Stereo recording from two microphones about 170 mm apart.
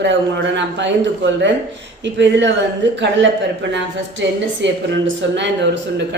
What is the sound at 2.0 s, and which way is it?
Speech, 90° right.